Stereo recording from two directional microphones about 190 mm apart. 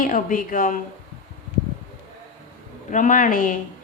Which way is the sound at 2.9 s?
45° left (ahead or behind).